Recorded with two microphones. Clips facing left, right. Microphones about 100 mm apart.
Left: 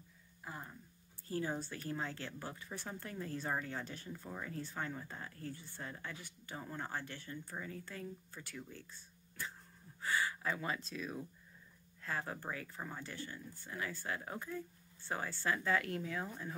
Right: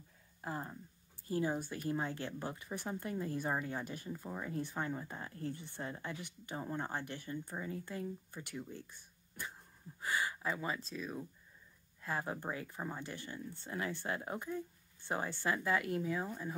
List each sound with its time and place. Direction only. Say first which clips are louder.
0.4 s a sound: right 6 dB; 40° right (ahead or behind)
1.2 s speech: right 3 dB; 15° right (ahead or behind); by 11.2 s centre (ahead or behind)
12.0 s speech: right 2 dB; 15° right (ahead or behind)